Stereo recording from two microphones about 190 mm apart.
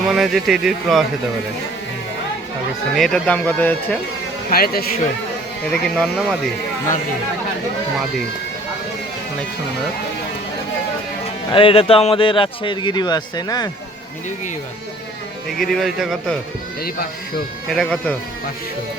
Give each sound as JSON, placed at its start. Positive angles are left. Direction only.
{"t": 0.1, "sound": "speech", "side_deg": 0}
{"t": 2.9, "sound": "speech", "side_deg": 5}
{"t": 4.5, "sound": "speech", "side_deg": 55}
{"t": 5.6, "sound": "speech", "side_deg": 5}
{"t": 11.5, "sound": "a man's voice", "side_deg": 30}
{"t": 15.5, "sound": "speech", "side_deg": 0}
{"t": 17.7, "sound": "speech", "side_deg": 5}